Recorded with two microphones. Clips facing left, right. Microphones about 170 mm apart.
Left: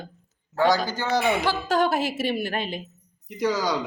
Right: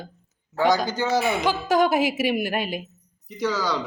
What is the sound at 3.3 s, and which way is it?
Speech, 15° left (ahead or behind).